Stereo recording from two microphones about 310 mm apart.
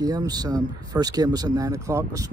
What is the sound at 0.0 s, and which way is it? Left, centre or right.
Speech, centre.